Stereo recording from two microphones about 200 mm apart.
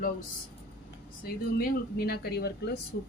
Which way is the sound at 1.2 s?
50° left (ahead or behind).